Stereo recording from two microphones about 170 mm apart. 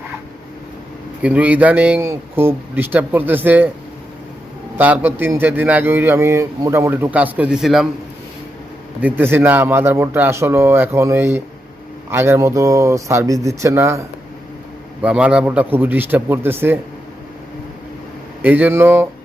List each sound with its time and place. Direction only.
1.2 s a man's voice: 10° right (ahead or behind)
4.8 s a man's voice: 10° right (ahead or behind)
9.0 s a man's voice: 10° right (ahead or behind)
15.0 s a man's voice: 5° right (ahead or behind)
18.4 s a man's voice: 10° right (ahead or behind)